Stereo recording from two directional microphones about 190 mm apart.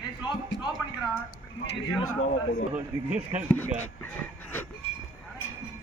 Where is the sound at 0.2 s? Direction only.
25° left (ahead or behind).